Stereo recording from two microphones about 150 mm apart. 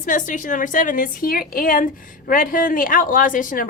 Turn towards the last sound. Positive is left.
turn(degrees=65)  # may be behind; listen again after turning